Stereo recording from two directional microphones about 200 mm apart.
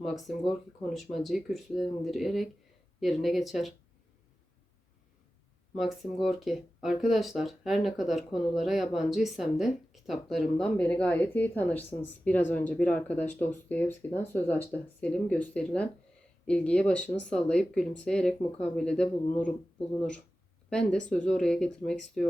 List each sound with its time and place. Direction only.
0.0 s speech: centre (ahead or behind)
5.7 s speech: centre (ahead or behind)
20.7 s speech: 5° left (ahead or behind)